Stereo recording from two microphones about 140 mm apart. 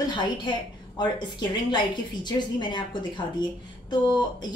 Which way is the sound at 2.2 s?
30° left (ahead or behind).